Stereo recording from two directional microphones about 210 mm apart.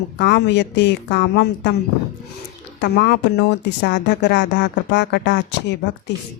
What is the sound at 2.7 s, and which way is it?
Speech, 55° left (ahead or behind).